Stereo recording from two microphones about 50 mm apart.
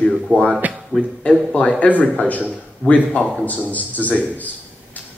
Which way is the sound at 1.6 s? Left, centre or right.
Left.